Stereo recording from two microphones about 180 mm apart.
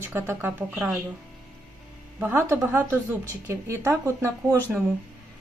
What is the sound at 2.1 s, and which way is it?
Speech, 10° right (ahead or behind).